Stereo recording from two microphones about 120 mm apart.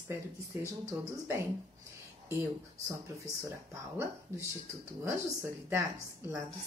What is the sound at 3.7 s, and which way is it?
A woman's voice, 25° right (ahead or behind).